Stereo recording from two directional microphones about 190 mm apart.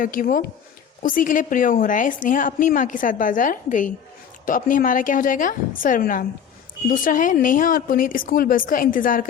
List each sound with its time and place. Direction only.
0.0 s a woman's voice: 45° left (ahead or behind)